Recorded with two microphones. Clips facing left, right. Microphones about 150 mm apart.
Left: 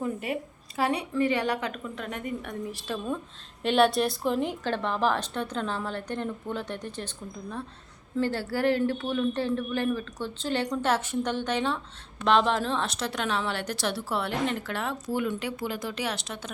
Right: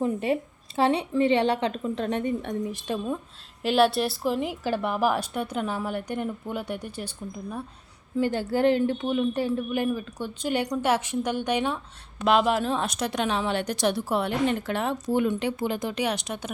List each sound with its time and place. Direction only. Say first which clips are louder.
0.0 s a woman's voice: right 5 dB; 25° right (ahead or behind)
3.6 s a woman's voice: right 1 dB; 5° right (ahead or behind)
8.1 s a woman's voice: right 3 dB; 15° right (ahead or behind)